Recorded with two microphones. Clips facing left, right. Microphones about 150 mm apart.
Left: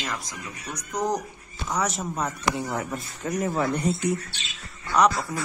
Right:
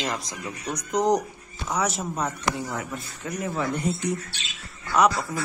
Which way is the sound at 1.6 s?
Centre (ahead or behind).